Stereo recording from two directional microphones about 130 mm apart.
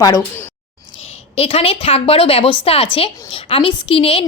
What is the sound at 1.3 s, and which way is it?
A woman's voice, 50° left (ahead or behind).